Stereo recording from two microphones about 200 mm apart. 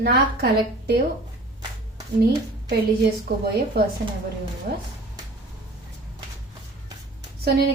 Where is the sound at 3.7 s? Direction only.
55° right (ahead or behind).